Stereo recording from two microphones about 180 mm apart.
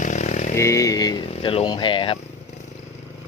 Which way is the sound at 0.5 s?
15° left (ahead or behind).